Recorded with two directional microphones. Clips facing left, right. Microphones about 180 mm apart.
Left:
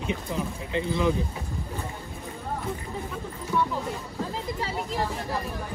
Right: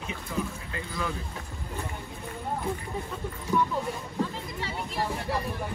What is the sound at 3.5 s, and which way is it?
Speech, 15° right (ahead or behind).